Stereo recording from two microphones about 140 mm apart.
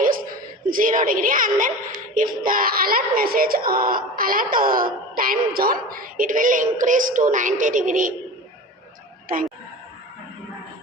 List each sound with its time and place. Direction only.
0.0 s a sound: 80° right
2.1 s a child's voice: 85° right
9.3 s a child's voice: 90° right